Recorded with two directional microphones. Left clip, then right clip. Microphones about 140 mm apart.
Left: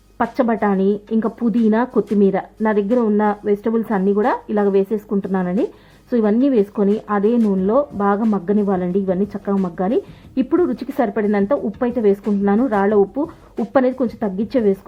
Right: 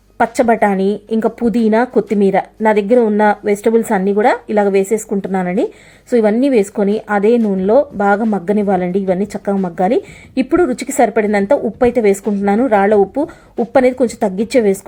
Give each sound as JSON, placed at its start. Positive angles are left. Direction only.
{"t": 0.2, "sound": "speech", "side_deg": -20}
{"t": 4.0, "sound": "a woman's voice", "side_deg": -15}